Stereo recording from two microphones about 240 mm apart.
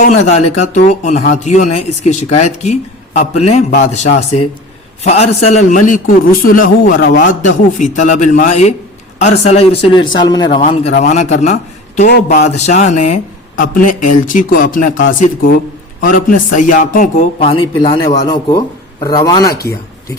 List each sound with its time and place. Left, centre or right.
0.0 s a man's voice: left
3.7 s a man's voice: left
5.0 s a man's voice: left
10.5 s a man's voice: left